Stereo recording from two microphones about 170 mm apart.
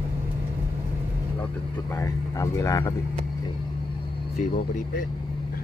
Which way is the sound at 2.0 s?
20° left (ahead or behind).